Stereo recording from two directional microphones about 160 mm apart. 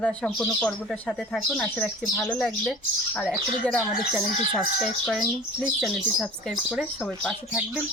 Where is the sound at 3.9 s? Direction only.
5° right (ahead or behind).